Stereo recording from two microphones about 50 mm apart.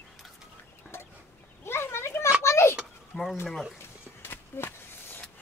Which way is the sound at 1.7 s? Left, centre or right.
Left.